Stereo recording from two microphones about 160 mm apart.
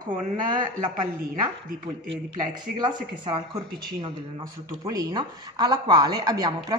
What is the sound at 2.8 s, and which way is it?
Speech, 25° right (ahead or behind).